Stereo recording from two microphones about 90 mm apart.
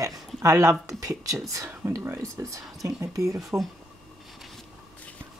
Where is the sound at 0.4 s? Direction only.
35° right (ahead or behind).